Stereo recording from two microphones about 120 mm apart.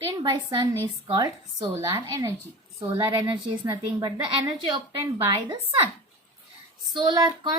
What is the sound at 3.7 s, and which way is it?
Speech, 30° right (ahead or behind).